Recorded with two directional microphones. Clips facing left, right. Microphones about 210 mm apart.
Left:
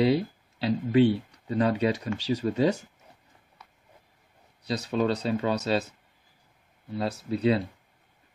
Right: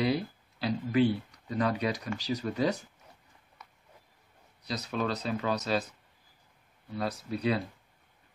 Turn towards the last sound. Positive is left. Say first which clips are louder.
# left 5 dB
turn(degrees=25)  # may be behind; listen again after turning